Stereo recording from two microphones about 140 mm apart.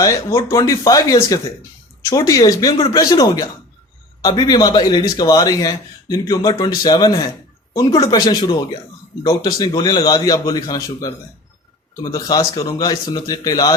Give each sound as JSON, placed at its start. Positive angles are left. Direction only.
{"t": 0.0, "sound": "a man's voice", "side_deg": 20}